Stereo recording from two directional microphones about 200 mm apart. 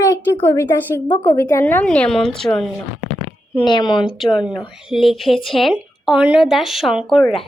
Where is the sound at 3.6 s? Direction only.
20° left (ahead or behind).